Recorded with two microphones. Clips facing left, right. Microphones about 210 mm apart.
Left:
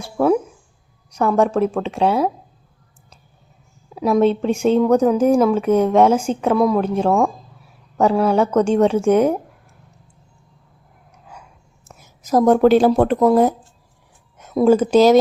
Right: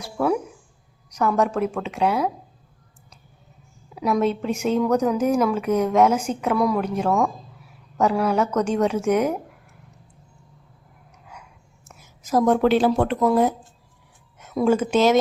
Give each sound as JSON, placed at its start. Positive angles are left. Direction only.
{"t": 0.0, "sound": "speech", "side_deg": 25}
{"t": 3.9, "sound": "speech", "side_deg": 30}
{"t": 12.2, "sound": "speech", "side_deg": 40}